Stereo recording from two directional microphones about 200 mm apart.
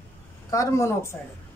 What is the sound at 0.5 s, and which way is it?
Speech, 15° left (ahead or behind).